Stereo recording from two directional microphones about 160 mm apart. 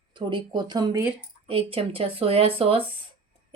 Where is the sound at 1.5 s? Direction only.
35° right (ahead or behind).